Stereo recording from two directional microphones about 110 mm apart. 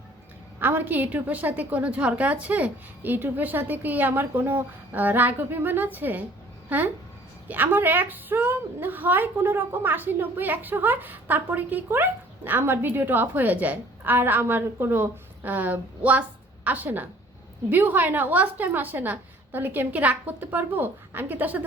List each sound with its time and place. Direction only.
0.6 s a woman's voice: 15° right (ahead or behind)